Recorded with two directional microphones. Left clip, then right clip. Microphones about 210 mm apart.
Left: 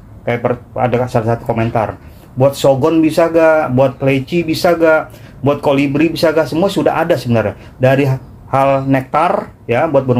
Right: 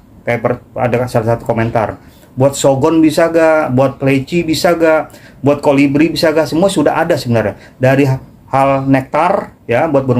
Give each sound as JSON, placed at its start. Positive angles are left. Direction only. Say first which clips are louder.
{"t": 0.2, "sound": "speech", "louder": "right 1 dB", "side_deg": -5}